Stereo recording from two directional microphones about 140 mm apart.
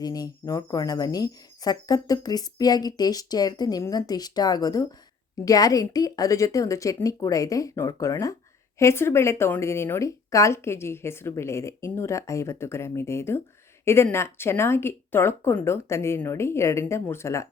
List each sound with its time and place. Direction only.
0.0 s speech: 25° left (ahead or behind)